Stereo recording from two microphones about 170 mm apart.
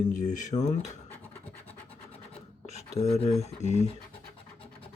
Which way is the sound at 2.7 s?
40° left (ahead or behind).